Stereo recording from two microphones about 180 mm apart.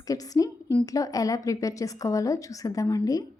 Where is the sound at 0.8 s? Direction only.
20° left (ahead or behind).